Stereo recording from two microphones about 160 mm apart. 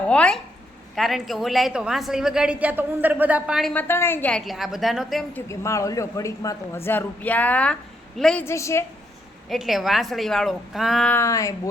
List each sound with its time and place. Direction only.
0.1 s a woman's voice: 5° left (ahead or behind)
5.3 s speech: 15° left (ahead or behind)
8.4 s speech: 15° left (ahead or behind)
9.5 s a woman's voice: centre (ahead or behind)
11.1 s speech: 20° left (ahead or behind)